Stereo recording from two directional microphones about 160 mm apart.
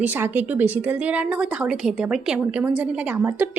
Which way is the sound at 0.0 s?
10° right (ahead or behind).